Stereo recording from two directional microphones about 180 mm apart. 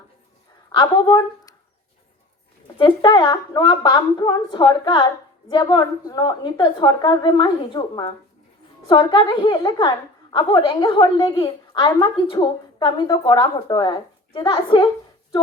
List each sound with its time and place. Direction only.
0.8 s speech: 25° left (ahead or behind)
2.7 s a woman's voice: 25° left (ahead or behind)